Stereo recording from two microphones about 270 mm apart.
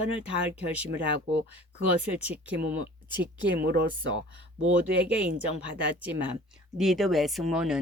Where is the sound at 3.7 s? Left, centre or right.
Right.